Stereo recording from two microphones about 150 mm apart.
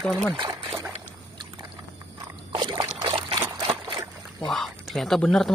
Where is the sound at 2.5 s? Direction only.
35° right (ahead or behind).